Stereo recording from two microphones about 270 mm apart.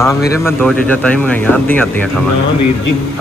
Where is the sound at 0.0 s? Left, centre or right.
Centre.